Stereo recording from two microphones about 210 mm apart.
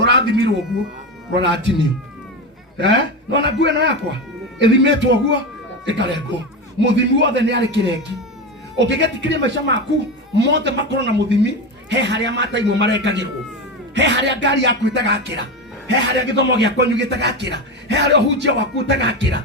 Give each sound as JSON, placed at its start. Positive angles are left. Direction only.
{"t": 0.0, "sound": "music", "side_deg": -55}
{"t": 1.4, "sound": "a man's voice", "side_deg": -55}
{"t": 2.7, "sound": "a man's voice", "side_deg": -55}